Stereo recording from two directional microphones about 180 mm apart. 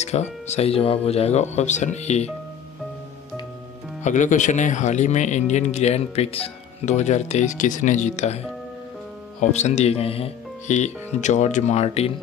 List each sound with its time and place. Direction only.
0.0 s speech: 40° left (ahead or behind)
4.0 s speech: 45° left (ahead or behind)
9.4 s speech: 40° left (ahead or behind)